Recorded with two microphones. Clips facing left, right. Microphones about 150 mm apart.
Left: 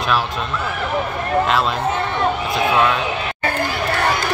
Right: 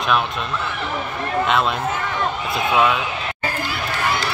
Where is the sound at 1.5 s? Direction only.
Centre (ahead or behind).